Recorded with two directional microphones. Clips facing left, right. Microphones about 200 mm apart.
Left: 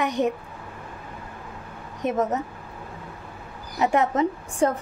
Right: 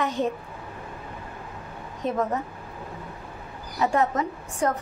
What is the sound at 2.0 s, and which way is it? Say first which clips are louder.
Speech: left 2 dB; 20° left (ahead or behind).